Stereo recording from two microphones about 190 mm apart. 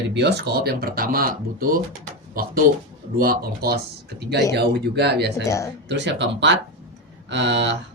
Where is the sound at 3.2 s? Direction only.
50° right (ahead or behind).